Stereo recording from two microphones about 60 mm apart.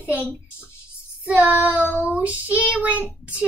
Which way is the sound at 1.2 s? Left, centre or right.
Right.